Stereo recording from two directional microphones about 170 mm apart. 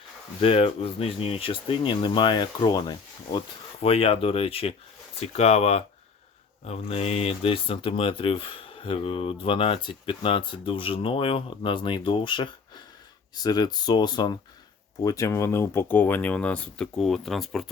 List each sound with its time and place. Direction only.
0.4 s speech: 35° left (ahead or behind); by 17.7 s centre (ahead or behind)